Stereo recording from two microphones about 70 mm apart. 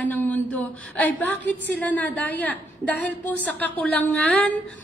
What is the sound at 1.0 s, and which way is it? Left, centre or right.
Female singing, left.